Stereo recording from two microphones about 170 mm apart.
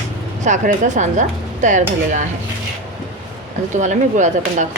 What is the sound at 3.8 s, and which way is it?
Speech, 45° right (ahead or behind).